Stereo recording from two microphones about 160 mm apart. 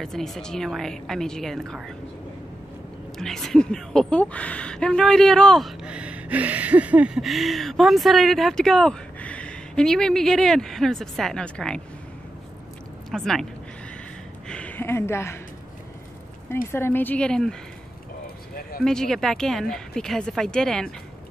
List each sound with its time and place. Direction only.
0.0 s a woman's voice: centre (ahead or behind)
3.2 s a woman's voice: centre (ahead or behind)
13.1 s a woman's voice: 5° left (ahead or behind)
14.5 s speech: 10° left (ahead or behind)
16.7 s a woman's voice: 15° left (ahead or behind)
18.2 s a sound: 70° left (ahead or behind)
18.9 s a woman's voice: 5° left (ahead or behind)